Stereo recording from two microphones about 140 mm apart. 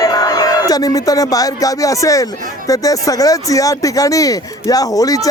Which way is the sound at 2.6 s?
25° left (ahead or behind).